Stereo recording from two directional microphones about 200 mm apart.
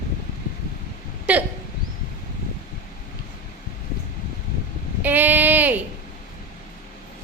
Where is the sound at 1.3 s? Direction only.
5° right (ahead or behind).